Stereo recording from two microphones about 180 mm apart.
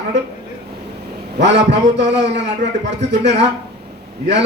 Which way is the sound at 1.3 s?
75° right (ahead or behind).